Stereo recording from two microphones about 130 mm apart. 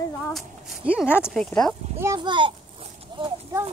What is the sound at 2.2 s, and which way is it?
Speech, 40° right (ahead or behind).